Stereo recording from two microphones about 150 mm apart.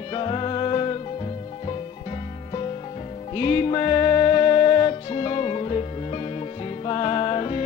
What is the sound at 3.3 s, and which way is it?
Music, 40° left (ahead or behind).